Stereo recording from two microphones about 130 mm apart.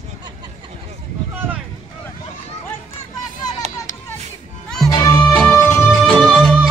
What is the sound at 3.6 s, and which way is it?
Children playing, 60° right (ahead or behind).